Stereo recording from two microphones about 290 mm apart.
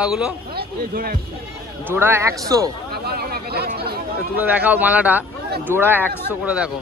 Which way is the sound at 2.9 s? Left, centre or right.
Right.